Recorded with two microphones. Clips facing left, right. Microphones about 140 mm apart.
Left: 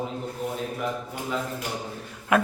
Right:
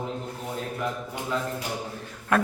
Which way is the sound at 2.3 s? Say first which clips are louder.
Left 2 dB; 10° left (ahead or behind).